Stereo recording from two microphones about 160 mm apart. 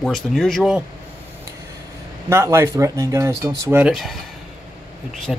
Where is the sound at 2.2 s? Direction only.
15° right (ahead or behind).